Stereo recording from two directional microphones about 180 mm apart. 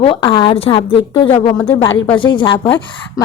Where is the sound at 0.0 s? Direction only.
30° left (ahead or behind).